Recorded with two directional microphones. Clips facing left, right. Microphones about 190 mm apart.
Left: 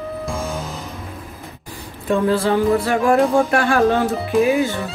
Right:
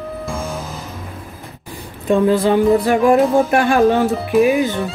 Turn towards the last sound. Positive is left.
turn(degrees=-15)  # may be behind; listen again after turning